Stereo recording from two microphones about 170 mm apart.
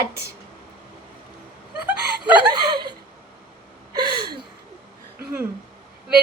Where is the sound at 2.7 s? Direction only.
25° right (ahead or behind).